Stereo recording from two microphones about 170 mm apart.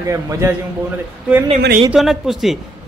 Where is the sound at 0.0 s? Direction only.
15° right (ahead or behind).